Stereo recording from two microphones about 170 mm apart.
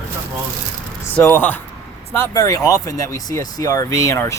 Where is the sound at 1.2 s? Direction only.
10° left (ahead or behind).